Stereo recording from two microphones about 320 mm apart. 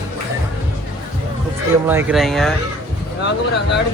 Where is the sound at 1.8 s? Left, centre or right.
Centre.